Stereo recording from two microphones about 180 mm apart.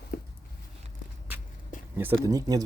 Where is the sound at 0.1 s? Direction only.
60° left (ahead or behind).